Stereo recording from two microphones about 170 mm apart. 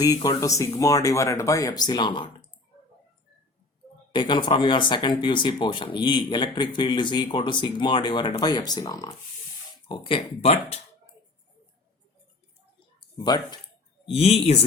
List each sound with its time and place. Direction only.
0.0 s speech: 20° left (ahead or behind)
4.1 s speech: 30° left (ahead or behind)
13.2 s speech: 25° left (ahead or behind)
14.0 s speech: 35° left (ahead or behind)